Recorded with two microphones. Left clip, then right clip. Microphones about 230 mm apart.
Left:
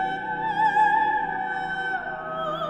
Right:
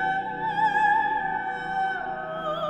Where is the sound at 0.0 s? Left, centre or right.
Left.